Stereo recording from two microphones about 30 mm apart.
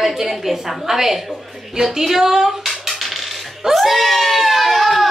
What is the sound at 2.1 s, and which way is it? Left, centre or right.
Dishes, centre.